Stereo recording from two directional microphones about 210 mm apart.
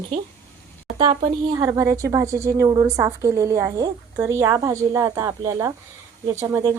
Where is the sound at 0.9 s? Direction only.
25° right (ahead or behind).